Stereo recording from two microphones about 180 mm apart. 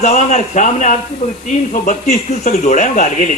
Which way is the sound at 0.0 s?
40° left (ahead or behind).